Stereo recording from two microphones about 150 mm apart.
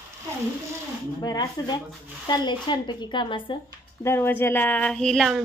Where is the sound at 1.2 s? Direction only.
30° left (ahead or behind).